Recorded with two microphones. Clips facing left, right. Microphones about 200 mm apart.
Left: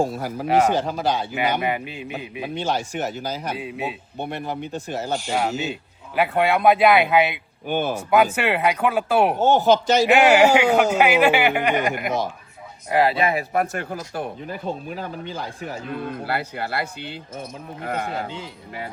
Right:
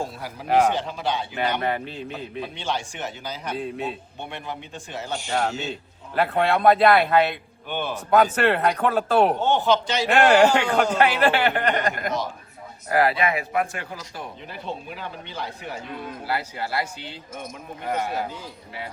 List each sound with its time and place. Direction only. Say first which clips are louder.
0.0 s speech: left 8 dB; 45° left (ahead or behind)
0.4 s speech: left 1 dB; 5° left (ahead or behind)
0.8 s speech: left 4 dB; 40° left (ahead or behind)
1.3 s speech: left 2 dB; 10° left (ahead or behind)
2.6 s speech: left 6 dB; 40° left (ahead or behind)
3.5 s speech: even; 5° left (ahead or behind)
4.7 s speech: left 5 dB; 40° left (ahead or behind)
5.3 s speech: right 1 dB; 5° left (ahead or behind)
7.7 s speech: left 5 dB; 45° left (ahead or behind)
8.1 s speech: right 1 dB; 5° left (ahead or behind)
9.4 s speech: left 4 dB; 40° left (ahead or behind)
10.1 s speech: even; 5° left (ahead or behind)
12.9 s speech: left 2 dB; 25° left (ahead or behind); by 15.8 s 45° left (ahead or behind)
16.0 s speech: even; 55° left (ahead or behind)